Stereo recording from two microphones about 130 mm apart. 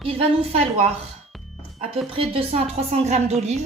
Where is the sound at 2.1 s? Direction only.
45° right (ahead or behind).